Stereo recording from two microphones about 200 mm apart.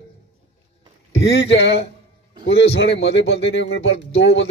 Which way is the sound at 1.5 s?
60° left (ahead or behind).